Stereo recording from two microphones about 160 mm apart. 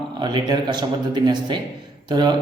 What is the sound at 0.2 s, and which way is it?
A man's voice, 25° right (ahead or behind).